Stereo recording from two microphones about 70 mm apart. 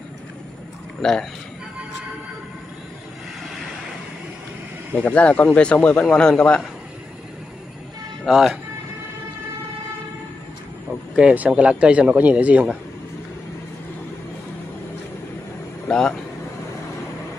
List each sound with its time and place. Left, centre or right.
1.0 s a man's voice: centre
4.9 s a man's voice: centre
8.3 s speech: centre
11.3 s speech: right
15.9 s a man's voice: centre